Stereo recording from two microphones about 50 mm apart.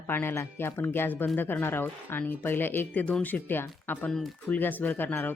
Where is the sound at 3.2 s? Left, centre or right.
Left.